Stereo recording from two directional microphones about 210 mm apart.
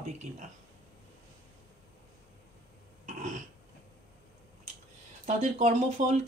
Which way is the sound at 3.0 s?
40° right (ahead or behind).